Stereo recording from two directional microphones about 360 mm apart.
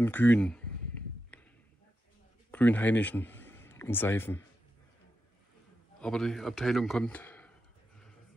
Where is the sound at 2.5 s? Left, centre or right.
Centre.